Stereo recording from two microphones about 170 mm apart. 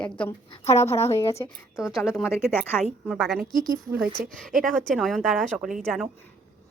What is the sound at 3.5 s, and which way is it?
A woman's voice, 55° right (ahead or behind).